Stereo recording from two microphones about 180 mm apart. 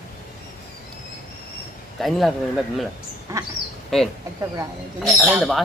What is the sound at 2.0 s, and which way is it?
Speech, centre (ahead or behind).